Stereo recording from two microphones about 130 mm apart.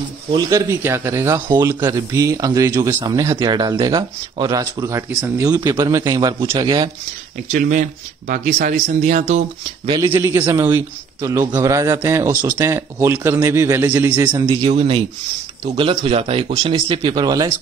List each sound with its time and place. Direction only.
0.5 s a man's voice: 20° right (ahead or behind)
7.5 s speech: 80° right
10.0 s a man's voice: 20° right (ahead or behind)
14.5 s speech: 40° right (ahead or behind)